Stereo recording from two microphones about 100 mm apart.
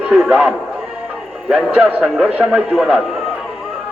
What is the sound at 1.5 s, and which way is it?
A man's voice, 15° right (ahead or behind).